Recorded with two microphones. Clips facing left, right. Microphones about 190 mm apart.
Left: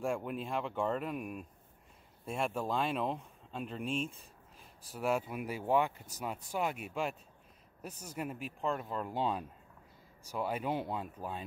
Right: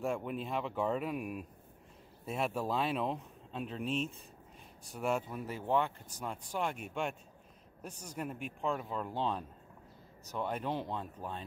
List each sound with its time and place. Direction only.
0.0 s speech: centre (ahead or behind)